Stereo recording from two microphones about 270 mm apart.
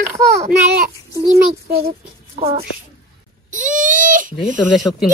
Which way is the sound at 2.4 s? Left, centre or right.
Right.